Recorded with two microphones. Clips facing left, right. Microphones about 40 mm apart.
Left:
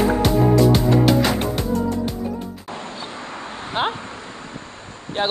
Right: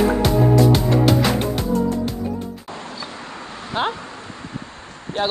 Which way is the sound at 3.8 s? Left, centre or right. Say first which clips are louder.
Even; centre.